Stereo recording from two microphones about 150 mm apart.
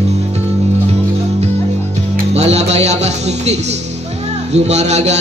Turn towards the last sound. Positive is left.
turn(degrees=-50)  # may be behind; listen again after turning